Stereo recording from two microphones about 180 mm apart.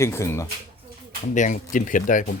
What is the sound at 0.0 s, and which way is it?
Speech, 15° left (ahead or behind).